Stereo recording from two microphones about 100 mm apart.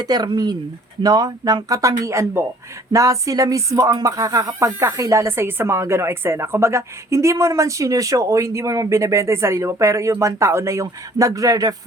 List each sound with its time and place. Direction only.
0.0 s speech: 45° right (ahead or behind)